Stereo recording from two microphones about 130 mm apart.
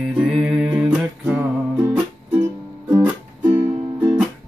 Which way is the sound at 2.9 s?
15° right (ahead or behind).